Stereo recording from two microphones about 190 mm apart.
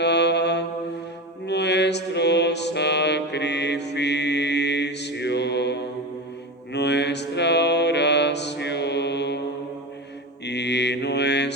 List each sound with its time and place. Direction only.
0.0 s mantra: 65° left (ahead or behind)
1.5 s music: 65° left (ahead or behind)
6.7 s mantra: 65° left (ahead or behind)
10.4 s mantra: 65° left (ahead or behind)